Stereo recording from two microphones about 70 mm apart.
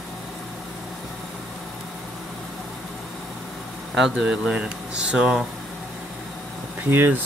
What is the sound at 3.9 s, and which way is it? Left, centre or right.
Speech, centre.